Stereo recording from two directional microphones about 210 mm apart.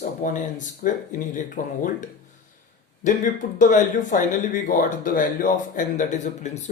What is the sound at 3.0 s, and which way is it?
Speech, 35° left (ahead or behind).